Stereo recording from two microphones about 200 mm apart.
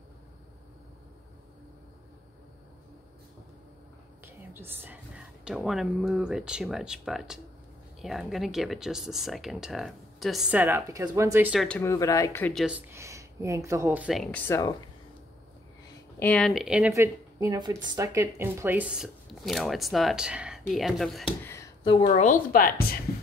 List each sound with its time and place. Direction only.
4.2 s speech: 10° right (ahead or behind)
11.6 s speech: 10° left (ahead or behind)
12.5 s speech: 5° right (ahead or behind)
16.2 s speech: 5° left (ahead or behind)
16.9 s speech: 15° right (ahead or behind); by 21.4 s centre (ahead or behind)
21.8 s a woman's voice: 25° left (ahead or behind)
22.1 s a woman's voice: 40° left (ahead or behind)